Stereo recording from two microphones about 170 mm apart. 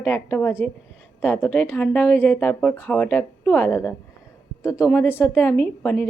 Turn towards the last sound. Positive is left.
turn(degrees=10)  # may be behind; listen again after turning